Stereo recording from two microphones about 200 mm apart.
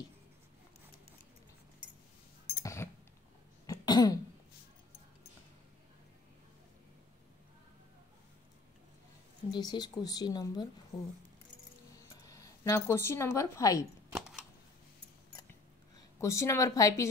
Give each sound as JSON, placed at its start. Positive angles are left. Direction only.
{"t": 2.6, "sound": "a sound", "side_deg": 15}
{"t": 3.6, "sound": "cough", "side_deg": 20}
{"t": 9.5, "sound": "a woman's voice", "side_deg": 20}
{"t": 12.3, "sound": "speech", "side_deg": 15}
{"t": 14.1, "sound": "a sound", "side_deg": 0}
{"t": 16.2, "sound": "a woman's voice", "side_deg": 15}